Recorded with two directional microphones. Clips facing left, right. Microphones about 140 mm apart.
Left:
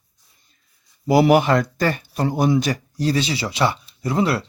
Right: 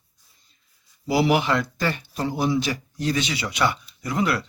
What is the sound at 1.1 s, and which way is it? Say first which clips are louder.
Speech: left 6 dB; 50° left (ahead or behind).